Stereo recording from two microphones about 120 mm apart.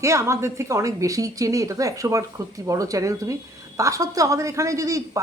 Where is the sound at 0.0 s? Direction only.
25° right (ahead or behind).